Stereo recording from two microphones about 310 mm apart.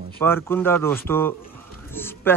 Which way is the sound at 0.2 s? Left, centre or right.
Centre.